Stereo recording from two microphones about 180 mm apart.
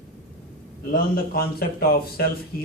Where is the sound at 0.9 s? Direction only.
55° left (ahead or behind).